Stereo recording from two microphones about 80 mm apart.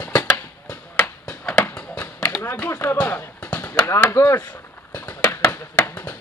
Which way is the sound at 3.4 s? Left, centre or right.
Centre.